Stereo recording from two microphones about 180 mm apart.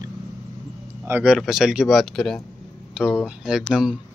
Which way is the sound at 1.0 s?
10° right (ahead or behind).